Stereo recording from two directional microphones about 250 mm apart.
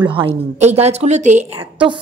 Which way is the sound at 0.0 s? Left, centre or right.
Right.